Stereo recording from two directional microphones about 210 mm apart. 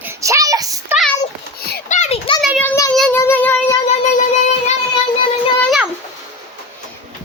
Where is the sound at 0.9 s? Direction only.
Centre (ahead or behind).